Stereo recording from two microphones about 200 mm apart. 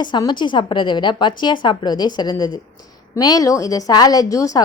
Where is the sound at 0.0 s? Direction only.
20° left (ahead or behind).